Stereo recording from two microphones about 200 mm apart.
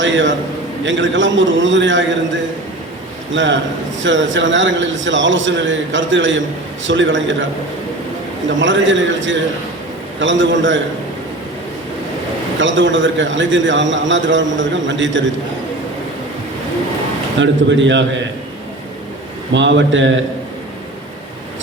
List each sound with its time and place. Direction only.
0.0 s a man's voice: 65° right (ahead or behind)
3.3 s a man's voice: 65° right (ahead or behind)
8.5 s a man's voice: 70° right (ahead or behind)
12.5 s a man's voice: 70° right (ahead or behind)
17.4 s a man's voice: 65° right (ahead or behind)
19.5 s a man's voice: 70° right (ahead or behind)